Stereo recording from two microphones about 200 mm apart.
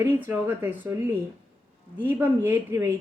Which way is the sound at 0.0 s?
10° right (ahead or behind).